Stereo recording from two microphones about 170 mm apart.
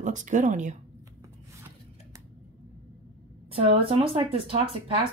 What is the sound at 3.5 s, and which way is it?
Speech, 35° right (ahead or behind).